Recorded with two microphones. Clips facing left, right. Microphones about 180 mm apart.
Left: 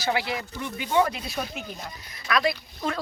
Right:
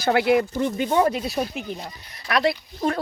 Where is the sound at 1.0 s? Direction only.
35° right (ahead or behind).